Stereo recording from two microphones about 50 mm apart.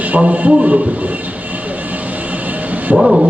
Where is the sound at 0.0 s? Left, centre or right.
Right.